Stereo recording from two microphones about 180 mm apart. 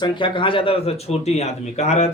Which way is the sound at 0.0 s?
25° left (ahead or behind).